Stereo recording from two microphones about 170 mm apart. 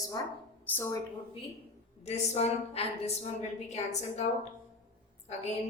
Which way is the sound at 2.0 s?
40° left (ahead or behind).